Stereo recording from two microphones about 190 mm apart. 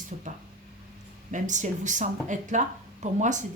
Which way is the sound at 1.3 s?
40° right (ahead or behind).